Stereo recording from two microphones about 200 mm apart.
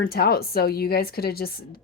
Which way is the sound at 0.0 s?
50° left (ahead or behind).